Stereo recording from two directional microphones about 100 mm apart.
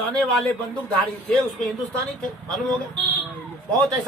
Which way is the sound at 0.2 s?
5° left (ahead or behind).